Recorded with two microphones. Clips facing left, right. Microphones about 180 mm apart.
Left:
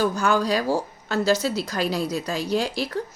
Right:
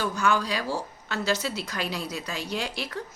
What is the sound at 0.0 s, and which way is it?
A woman's voice, 35° left (ahead or behind).